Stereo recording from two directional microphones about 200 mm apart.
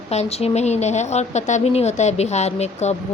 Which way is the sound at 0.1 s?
30° left (ahead or behind).